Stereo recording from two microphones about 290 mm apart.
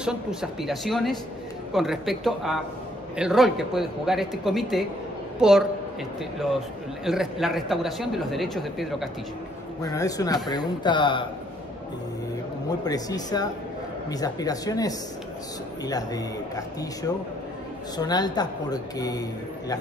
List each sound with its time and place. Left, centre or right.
0.0 s speech: centre
7.1 s speech: centre
9.8 s speech: centre
12.8 s speech: centre